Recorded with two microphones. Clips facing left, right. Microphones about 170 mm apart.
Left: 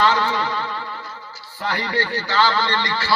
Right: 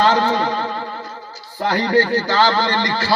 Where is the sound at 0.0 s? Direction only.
45° right (ahead or behind).